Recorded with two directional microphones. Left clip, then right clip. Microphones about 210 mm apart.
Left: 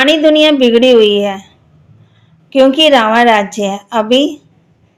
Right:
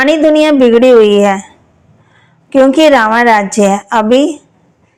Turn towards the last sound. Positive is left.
turn(degrees=-25)  # may be behind; listen again after turning